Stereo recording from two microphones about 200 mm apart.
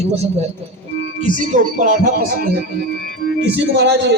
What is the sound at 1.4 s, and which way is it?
Speech, 40° right (ahead or behind).